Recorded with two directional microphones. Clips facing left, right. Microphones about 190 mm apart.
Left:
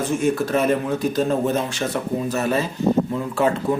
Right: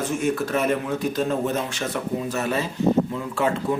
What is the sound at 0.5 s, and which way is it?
A man's voice, 35° left (ahead or behind).